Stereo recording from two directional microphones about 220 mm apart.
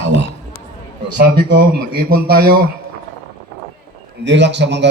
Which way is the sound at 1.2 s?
45° right (ahead or behind).